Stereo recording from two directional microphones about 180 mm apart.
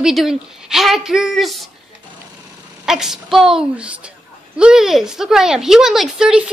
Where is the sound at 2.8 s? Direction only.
5° right (ahead or behind).